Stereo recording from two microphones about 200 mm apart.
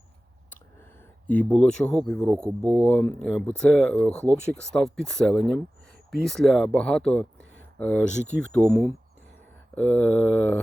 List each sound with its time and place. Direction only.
1.3 s speech: 5° left (ahead or behind)
9.7 s mantra: 10° left (ahead or behind)